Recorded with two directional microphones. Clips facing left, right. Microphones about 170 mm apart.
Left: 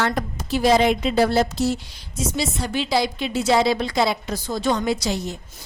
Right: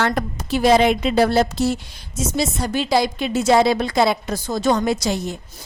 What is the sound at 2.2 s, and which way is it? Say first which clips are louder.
A woman's voice: right 3 dB; 45° right (ahead or behind).